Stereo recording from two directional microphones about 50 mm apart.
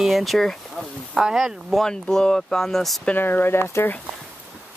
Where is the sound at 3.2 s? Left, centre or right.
Left.